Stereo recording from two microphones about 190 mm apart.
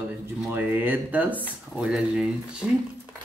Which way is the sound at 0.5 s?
10° right (ahead or behind).